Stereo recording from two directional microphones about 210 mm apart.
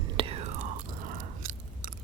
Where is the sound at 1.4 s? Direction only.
40° right (ahead or behind).